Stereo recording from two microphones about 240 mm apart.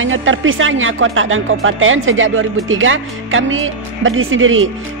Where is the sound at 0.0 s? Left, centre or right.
Right.